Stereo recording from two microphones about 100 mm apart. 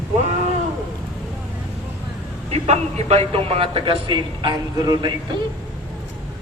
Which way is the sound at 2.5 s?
90° right.